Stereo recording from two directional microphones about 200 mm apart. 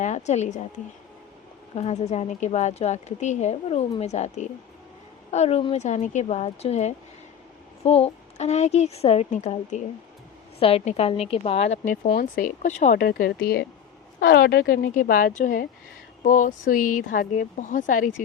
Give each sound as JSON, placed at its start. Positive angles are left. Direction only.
{"t": 0.0, "sound": "speech", "side_deg": 35}
{"t": 1.7, "sound": "a woman's voice", "side_deg": 35}